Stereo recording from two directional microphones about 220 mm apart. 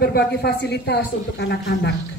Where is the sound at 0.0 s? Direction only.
45° left (ahead or behind).